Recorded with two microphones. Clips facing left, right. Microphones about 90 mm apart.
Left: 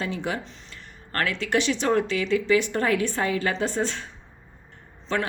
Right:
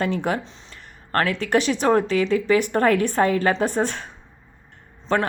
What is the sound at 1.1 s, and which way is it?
A woman's voice, 35° right (ahead or behind).